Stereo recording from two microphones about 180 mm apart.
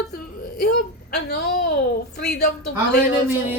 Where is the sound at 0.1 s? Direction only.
60° left (ahead or behind).